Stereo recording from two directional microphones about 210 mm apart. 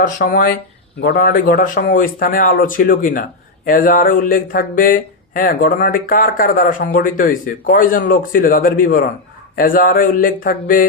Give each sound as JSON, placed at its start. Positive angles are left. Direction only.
{"t": 0.0, "sound": "speech", "side_deg": 40}